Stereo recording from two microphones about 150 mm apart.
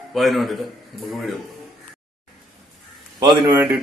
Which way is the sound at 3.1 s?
30° right (ahead or behind).